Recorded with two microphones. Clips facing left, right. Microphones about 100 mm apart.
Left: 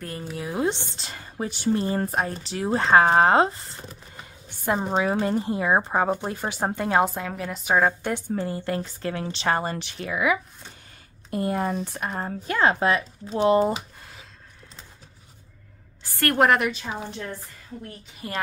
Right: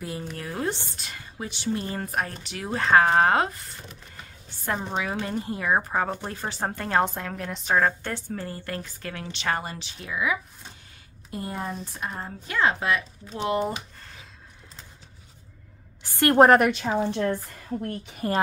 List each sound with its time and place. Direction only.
0.2 s speech: 10° left (ahead or behind); by 4.0 s 30° left (ahead or behind)
4.2 s a sound: 15° left (ahead or behind)
4.7 s a woman's voice: 30° left (ahead or behind)
6.0 s a woman's voice: 10° left (ahead or behind); by 9.8 s 30° left (ahead or behind)
9.8 s speech: 60° left (ahead or behind); by 13.7 s 35° left (ahead or behind)
16.0 s a sound: 20° right (ahead or behind)
16.3 s a woman's voice: 40° right (ahead or behind)
16.6 s a woman's voice: 60° right (ahead or behind)
17.8 s a woman's voice: 40° right (ahead or behind)